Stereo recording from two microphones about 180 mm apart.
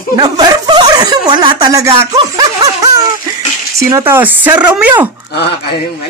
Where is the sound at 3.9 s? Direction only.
15° right (ahead or behind).